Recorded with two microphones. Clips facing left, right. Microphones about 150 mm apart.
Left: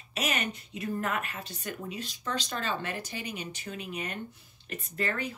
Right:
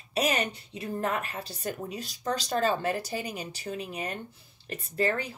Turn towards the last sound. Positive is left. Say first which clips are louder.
# right 4 dB
turn(degrees=-30)  # may be behind; listen again after turning